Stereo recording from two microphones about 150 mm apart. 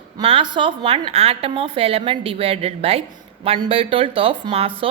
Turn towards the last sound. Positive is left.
turn(degrees=-40)  # may be behind; listen again after turning